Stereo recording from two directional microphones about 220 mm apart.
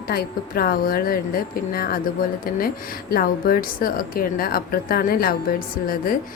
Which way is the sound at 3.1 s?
40° left (ahead or behind).